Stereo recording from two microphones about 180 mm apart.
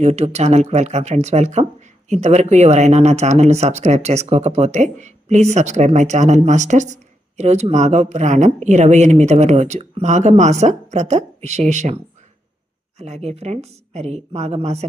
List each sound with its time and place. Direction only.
0.0 s speech: 35° right (ahead or behind)
13.0 s speech: 35° right (ahead or behind)